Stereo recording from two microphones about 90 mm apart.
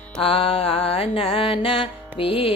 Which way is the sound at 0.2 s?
90° left.